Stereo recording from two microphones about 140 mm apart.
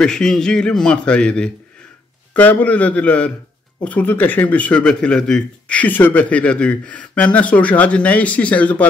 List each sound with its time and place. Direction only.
0.0 s a man's voice: 5° left (ahead or behind)